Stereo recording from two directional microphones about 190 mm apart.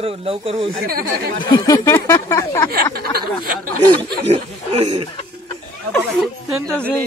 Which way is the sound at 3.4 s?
45° right (ahead or behind).